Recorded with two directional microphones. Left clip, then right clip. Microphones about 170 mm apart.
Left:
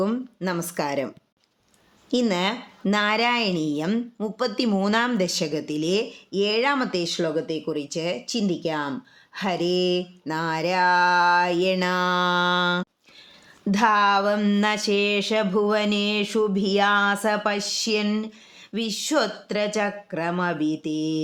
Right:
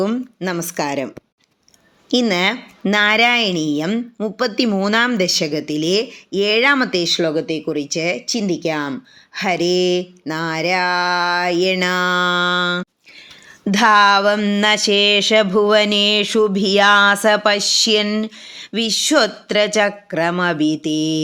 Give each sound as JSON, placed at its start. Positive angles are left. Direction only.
{"t": 0.0, "sound": "speech", "side_deg": -10}
{"t": 13.7, "sound": "speech", "side_deg": -25}